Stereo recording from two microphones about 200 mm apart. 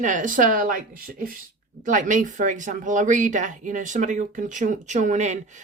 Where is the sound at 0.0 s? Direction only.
40° right (ahead or behind).